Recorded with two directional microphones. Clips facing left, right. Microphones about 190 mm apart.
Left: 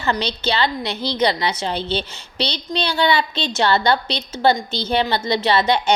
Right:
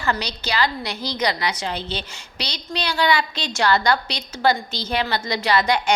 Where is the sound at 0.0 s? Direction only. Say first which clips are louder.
Left 4 dB; 25° left (ahead or behind).